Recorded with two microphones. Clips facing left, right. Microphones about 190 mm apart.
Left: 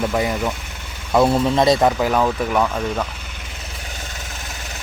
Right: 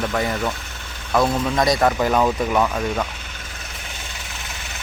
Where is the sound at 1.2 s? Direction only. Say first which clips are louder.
Left 4 dB; 30° left (ahead or behind).